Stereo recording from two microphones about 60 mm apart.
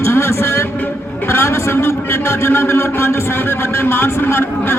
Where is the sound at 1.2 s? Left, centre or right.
Left.